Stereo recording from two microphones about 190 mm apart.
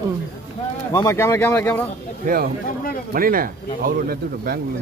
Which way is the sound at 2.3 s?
50° right (ahead or behind).